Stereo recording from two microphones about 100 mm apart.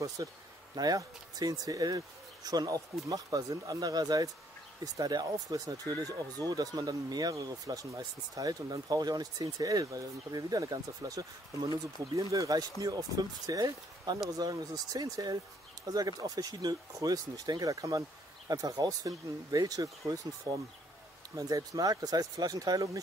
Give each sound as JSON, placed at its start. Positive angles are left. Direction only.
{"t": 0.2, "sound": "speech", "side_deg": -40}